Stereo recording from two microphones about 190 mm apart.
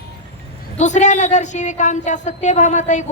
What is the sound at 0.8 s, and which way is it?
A woman's voice, 40° left (ahead or behind).